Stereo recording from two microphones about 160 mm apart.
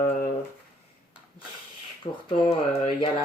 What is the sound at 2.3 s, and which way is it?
Speech, 45° left (ahead or behind).